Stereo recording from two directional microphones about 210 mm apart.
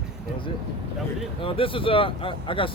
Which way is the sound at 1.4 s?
25° left (ahead or behind).